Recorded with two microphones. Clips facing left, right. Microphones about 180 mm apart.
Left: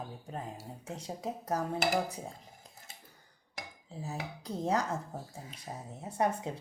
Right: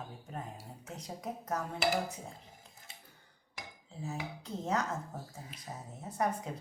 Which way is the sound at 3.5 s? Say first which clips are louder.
Left 3 dB; 40° left (ahead or behind).